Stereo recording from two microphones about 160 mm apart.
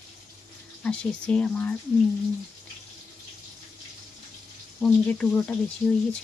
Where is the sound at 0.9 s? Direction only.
5° left (ahead or behind).